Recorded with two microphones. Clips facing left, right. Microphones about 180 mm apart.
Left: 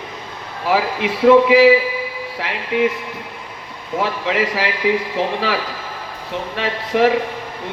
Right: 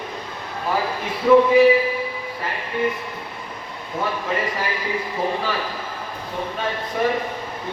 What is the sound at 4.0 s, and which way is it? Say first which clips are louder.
A man's voice: left 4 dB; 85° left.